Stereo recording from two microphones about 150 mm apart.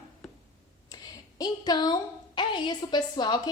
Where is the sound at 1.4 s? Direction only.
25° left (ahead or behind).